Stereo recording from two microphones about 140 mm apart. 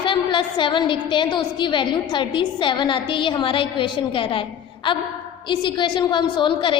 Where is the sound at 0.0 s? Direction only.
35° left (ahead or behind).